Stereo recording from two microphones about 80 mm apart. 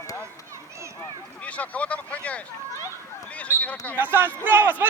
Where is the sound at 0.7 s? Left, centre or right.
Right.